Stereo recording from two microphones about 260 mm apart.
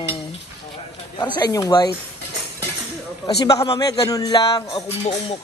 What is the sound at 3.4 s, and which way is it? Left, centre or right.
Music, centre.